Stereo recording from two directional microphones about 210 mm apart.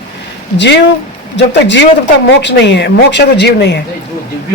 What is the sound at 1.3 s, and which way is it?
Speech, 55° left (ahead or behind).